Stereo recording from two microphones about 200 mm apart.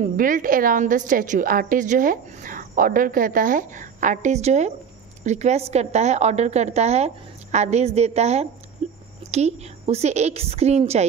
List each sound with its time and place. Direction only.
0.0 s a woman's voice: 45° right (ahead or behind)
8.8 s a sound: 35° right (ahead or behind)
9.3 s a woman's voice: 30° right (ahead or behind)